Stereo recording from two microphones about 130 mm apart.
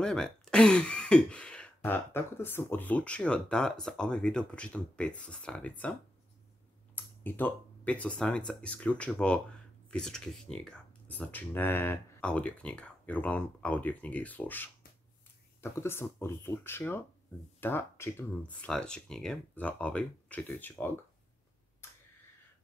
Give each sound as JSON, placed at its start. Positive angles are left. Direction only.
{"t": 0.0, "sound": "speech", "side_deg": 5}
{"t": 7.2, "sound": "speech", "side_deg": 15}
{"t": 18.7, "sound": "speech", "side_deg": 5}